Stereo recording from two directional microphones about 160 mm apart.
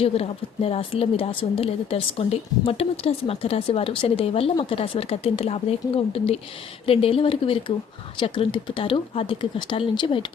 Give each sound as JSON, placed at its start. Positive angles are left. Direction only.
{"t": 0.0, "sound": "a woman's voice", "side_deg": 35}